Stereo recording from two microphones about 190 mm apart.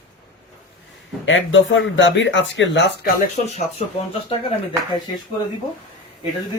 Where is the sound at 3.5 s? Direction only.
30° left (ahead or behind).